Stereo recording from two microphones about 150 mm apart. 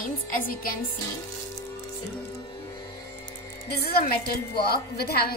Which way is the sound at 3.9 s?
90° left.